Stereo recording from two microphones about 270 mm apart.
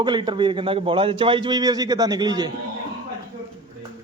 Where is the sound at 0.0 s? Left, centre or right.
Centre.